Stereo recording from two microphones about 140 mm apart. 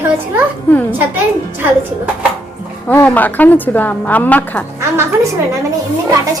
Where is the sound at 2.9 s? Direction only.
10° left (ahead or behind).